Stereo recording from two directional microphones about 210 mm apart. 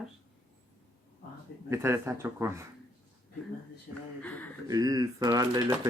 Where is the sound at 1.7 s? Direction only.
10° right (ahead or behind).